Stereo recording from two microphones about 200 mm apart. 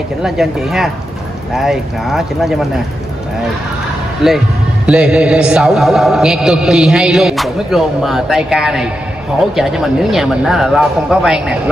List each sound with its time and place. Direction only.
0.2 s a man's voice: centre (ahead or behind)
4.2 s a man's voice: centre (ahead or behind)